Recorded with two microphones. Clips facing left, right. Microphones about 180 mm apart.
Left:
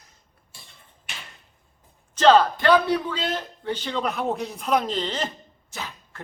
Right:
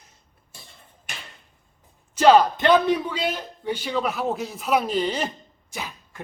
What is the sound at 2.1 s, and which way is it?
Speech, 10° right (ahead or behind).